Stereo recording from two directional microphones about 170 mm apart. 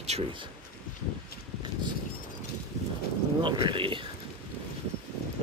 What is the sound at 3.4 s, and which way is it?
Speech, 30° right (ahead or behind).